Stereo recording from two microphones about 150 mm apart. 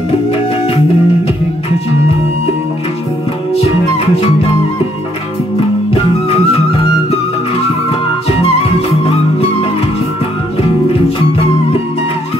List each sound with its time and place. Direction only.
0.3 s music: 40° left (ahead or behind)
3.5 s music: 40° left (ahead or behind)
6.2 s music: 40° left (ahead or behind)